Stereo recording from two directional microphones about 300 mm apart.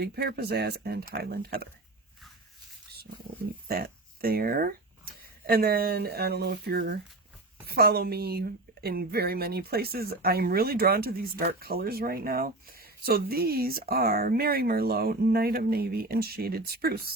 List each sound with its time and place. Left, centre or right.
0.0 s a woman's voice: right
3.7 s a woman's voice: right